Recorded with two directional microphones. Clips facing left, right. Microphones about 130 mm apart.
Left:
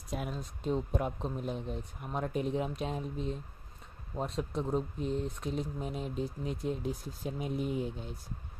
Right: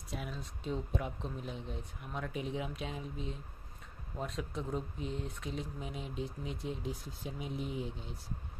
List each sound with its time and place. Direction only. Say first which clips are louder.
0.1 s speech: left 5 dB; 45° left (ahead or behind)